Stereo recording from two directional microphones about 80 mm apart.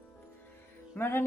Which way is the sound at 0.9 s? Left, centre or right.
Left.